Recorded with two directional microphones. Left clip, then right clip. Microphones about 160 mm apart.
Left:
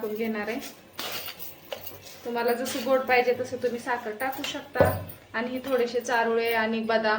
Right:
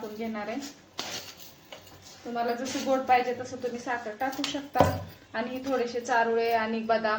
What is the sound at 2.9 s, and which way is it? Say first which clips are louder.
Speech: left 3 dB; 25° left (ahead or behind).